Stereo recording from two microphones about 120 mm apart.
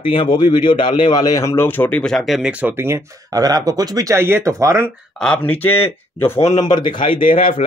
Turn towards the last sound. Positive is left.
turn(degrees=45)  # may be behind; listen again after turning